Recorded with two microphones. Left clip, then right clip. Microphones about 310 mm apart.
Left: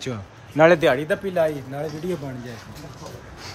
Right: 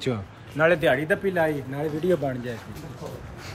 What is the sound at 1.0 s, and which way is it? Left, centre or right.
Speech, centre.